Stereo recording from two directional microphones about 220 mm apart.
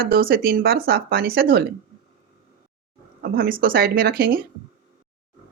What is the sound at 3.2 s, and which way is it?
Speech, 40° right (ahead or behind).